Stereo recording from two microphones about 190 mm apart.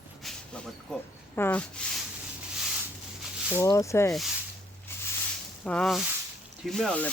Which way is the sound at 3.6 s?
15° left (ahead or behind).